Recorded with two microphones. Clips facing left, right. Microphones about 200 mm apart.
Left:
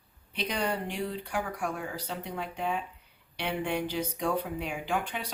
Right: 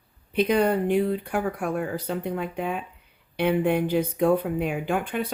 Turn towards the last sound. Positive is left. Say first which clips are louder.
# right 6 dB
turn(degrees=-55)  # may be behind; listen again after turning